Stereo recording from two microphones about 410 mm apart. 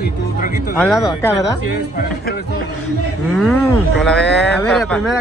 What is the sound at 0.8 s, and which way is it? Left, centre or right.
Speech, centre.